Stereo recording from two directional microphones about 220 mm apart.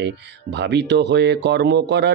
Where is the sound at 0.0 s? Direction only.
50° right (ahead or behind).